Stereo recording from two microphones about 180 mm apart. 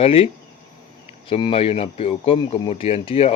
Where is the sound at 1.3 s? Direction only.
30° left (ahead or behind).